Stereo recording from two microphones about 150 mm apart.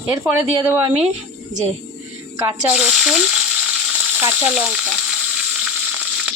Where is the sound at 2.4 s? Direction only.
25° right (ahead or behind).